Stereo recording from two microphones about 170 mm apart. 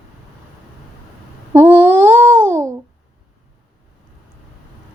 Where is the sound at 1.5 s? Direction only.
10° right (ahead or behind).